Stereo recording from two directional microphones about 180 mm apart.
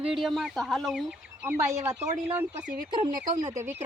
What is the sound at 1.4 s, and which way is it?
Speech, 15° right (ahead or behind).